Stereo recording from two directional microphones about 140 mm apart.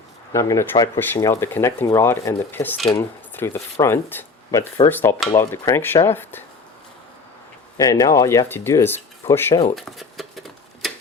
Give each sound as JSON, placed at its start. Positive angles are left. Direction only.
{"t": 0.3, "sound": "speech", "side_deg": 25}
{"t": 7.8, "sound": "speech", "side_deg": 25}
{"t": 9.7, "sound": "a sound", "side_deg": 0}